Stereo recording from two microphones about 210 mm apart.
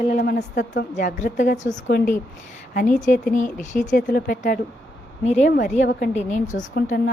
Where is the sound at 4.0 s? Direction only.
50° left (ahead or behind).